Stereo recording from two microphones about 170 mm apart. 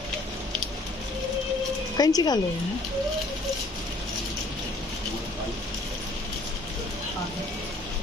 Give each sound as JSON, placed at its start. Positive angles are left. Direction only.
{"t": 2.0, "sound": "speech", "side_deg": 20}